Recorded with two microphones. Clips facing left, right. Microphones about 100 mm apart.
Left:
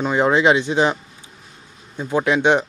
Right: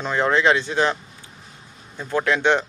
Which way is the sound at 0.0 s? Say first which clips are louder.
Left 3 dB; 15° left (ahead or behind).